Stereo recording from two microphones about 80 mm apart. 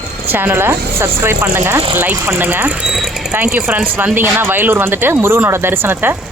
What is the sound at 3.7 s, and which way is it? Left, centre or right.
Speech, right.